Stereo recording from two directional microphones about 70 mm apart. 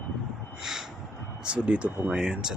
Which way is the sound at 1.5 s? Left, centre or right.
Centre.